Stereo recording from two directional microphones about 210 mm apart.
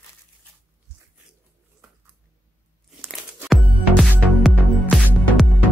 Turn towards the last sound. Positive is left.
turn(degrees=0)  # may be behind; listen again after turning